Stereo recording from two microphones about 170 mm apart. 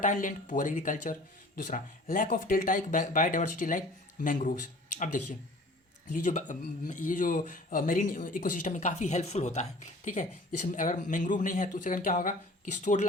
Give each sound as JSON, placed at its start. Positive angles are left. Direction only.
{"t": 0.0, "sound": "speech", "side_deg": 50}
{"t": 6.1, "sound": "speech", "side_deg": 45}